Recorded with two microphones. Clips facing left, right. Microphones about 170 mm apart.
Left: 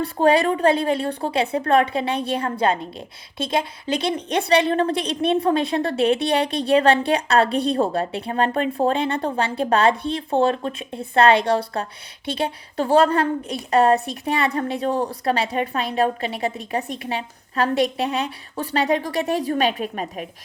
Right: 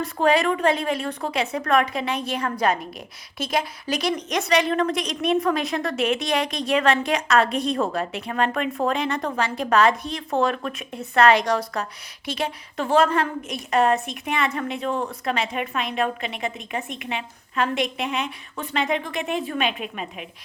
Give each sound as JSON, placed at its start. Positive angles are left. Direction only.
{"t": 0.0, "sound": "a woman's voice", "side_deg": 30}